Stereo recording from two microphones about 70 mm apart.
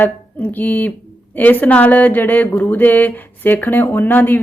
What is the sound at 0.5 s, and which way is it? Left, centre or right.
Speech, left.